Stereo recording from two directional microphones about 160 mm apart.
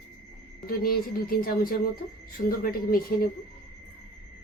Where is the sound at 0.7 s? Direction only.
65° left (ahead or behind).